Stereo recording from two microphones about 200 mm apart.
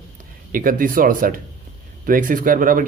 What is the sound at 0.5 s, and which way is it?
A man's voice, 45° right (ahead or behind).